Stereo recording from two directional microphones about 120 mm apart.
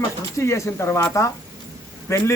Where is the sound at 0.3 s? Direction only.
25° left (ahead or behind).